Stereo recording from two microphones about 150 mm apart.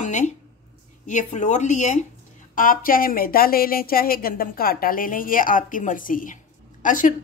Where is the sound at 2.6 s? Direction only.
70° left (ahead or behind).